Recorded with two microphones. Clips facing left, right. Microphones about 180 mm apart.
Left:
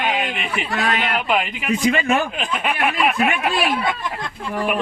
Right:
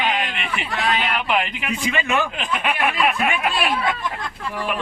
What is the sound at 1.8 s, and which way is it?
Speech, 40° left (ahead or behind).